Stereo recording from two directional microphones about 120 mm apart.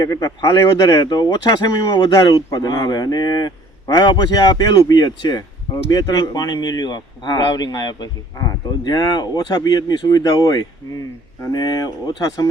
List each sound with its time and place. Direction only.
0.0 s speech: 30° left (ahead or behind)